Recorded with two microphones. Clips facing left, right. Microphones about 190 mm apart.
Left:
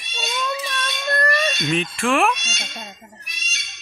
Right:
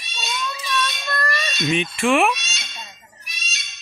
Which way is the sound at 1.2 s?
55° left (ahead or behind).